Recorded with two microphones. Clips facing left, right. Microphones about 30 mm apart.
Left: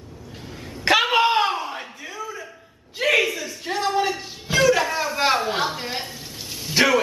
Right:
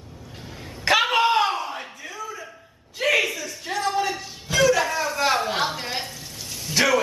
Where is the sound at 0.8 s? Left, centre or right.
Centre.